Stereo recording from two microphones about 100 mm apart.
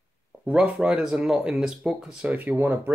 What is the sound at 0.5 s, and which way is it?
Speech, 10° right (ahead or behind).